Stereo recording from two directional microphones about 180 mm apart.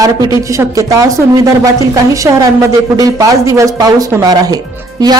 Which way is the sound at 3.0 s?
20° right (ahead or behind).